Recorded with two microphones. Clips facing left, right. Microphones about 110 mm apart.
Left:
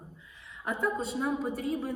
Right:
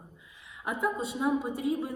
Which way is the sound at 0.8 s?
5° right (ahead or behind).